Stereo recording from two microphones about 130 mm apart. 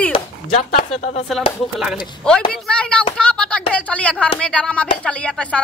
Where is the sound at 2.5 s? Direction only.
10° left (ahead or behind).